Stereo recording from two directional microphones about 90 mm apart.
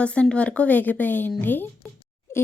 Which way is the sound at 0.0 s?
10° left (ahead or behind).